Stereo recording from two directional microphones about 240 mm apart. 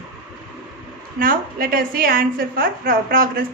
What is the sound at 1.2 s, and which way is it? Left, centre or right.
A woman's voice, right.